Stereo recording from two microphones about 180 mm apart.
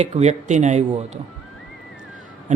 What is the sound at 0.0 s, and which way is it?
Speech, 40° right (ahead or behind).